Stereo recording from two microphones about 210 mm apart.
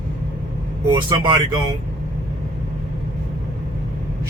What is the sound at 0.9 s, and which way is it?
Speech, 20° right (ahead or behind).